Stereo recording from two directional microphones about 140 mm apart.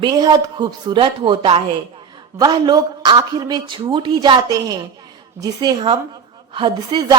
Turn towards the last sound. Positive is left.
turn(degrees=-30)  # may be behind; listen again after turning